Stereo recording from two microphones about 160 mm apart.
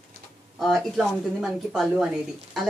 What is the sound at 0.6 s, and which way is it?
Speech, centre (ahead or behind).